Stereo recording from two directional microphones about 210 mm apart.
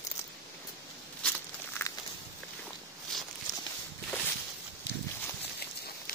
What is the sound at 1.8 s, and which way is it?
Walk, 10° left (ahead or behind).